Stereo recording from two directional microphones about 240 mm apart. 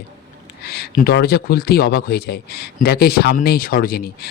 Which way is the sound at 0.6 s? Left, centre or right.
Left.